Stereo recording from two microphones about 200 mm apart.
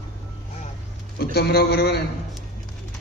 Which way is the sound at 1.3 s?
50° left (ahead or behind).